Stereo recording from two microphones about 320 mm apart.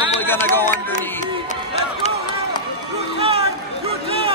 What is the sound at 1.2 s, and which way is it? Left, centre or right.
Speech, left.